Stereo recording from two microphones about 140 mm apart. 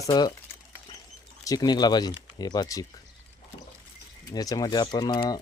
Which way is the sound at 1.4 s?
30° left (ahead or behind).